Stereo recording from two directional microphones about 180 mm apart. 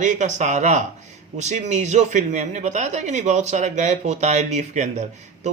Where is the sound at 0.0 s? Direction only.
45° right (ahead or behind).